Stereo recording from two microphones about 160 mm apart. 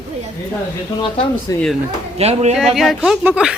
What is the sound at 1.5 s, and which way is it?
Speech, 20° left (ahead or behind).